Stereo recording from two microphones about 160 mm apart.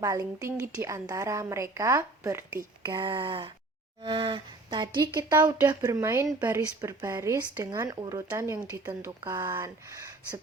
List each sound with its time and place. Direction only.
0.0 s speech: 20° right (ahead or behind)